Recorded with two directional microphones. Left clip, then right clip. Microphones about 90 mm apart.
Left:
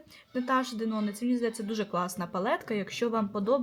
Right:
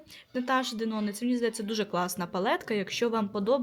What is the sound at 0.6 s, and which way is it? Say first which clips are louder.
Speech: right 1 dB; 25° right (ahead or behind).